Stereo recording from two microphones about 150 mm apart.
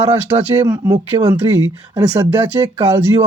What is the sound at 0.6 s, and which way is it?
Speech, 15° right (ahead or behind).